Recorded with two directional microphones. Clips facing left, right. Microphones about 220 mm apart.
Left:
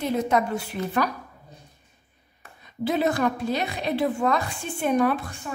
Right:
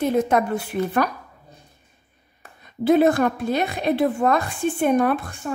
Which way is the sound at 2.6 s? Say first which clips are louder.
Right 7 dB; 50° right (ahead or behind).